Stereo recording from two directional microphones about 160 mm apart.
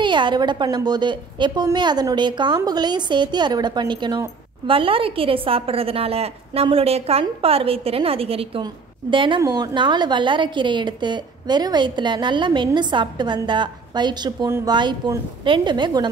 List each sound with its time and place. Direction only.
0.0 s a woman's voice: 30° right (ahead or behind)